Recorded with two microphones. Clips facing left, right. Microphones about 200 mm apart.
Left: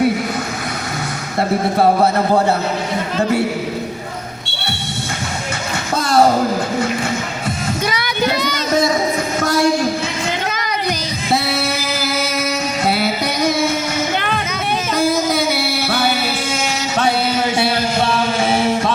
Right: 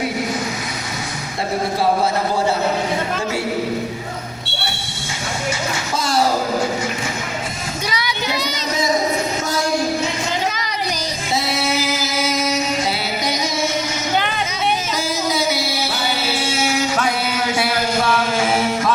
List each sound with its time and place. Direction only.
5.9 s music: 60° left (ahead or behind)
7.9 s child singing: 55° left (ahead or behind)
11.3 s singing: 60° left (ahead or behind)
14.9 s music: 60° left (ahead or behind)
17.6 s music: 30° left (ahead or behind)